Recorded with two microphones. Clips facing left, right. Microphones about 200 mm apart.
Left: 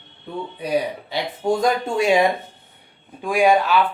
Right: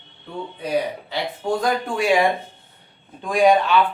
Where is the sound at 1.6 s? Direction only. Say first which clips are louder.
Left 2 dB; 25° left (ahead or behind).